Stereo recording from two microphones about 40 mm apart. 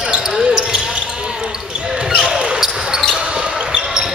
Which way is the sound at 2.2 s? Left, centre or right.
Centre.